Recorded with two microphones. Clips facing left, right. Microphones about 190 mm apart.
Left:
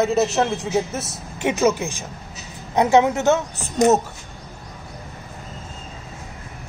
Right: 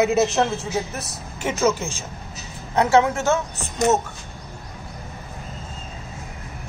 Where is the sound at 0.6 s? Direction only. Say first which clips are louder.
Left 4 dB; 20° left (ahead or behind).